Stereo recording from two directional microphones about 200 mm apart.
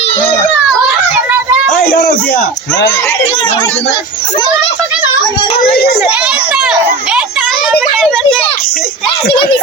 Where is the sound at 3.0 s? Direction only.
25° left (ahead or behind).